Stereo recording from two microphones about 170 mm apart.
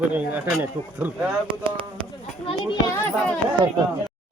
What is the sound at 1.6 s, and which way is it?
Speech, 30° right (ahead or behind).